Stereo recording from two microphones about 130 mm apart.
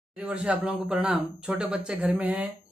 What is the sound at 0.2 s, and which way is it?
Speech, 10° right (ahead or behind).